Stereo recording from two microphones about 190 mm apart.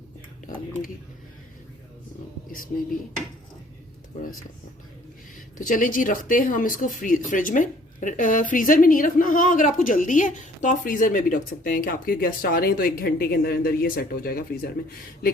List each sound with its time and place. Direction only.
0.4 s speech: 45° left (ahead or behind)
5.5 s speech: 45° left (ahead or behind)